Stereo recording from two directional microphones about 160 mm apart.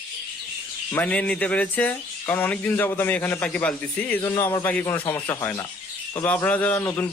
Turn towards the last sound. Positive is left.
turn(degrees=15)  # may be behind; listen again after turning